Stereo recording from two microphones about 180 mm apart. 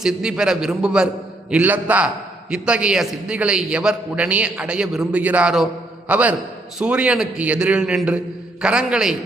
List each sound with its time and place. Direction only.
0.0 s a man's voice: 5° right (ahead or behind)